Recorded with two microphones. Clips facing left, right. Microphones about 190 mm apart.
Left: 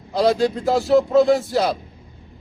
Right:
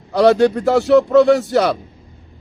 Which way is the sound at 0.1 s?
70° right (ahead or behind).